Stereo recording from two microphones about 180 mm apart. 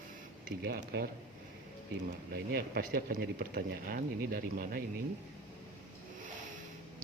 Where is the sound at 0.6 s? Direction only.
60° right (ahead or behind).